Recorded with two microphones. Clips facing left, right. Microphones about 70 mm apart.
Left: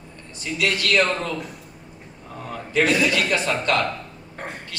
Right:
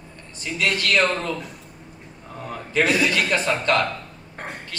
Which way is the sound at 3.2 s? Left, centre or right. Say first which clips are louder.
Right 1 dB; right.